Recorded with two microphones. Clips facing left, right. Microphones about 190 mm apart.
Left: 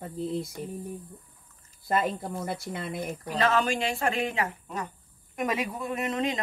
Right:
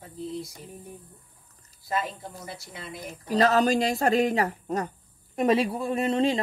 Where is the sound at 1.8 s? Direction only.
55° left (ahead or behind).